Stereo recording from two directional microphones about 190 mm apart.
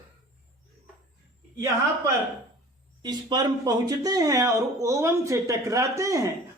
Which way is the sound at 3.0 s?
20° right (ahead or behind).